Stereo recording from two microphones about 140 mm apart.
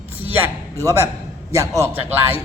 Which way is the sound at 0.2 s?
20° right (ahead or behind).